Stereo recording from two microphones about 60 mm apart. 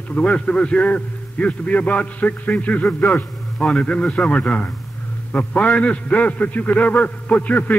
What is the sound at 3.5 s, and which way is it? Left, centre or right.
A man's voice, centre.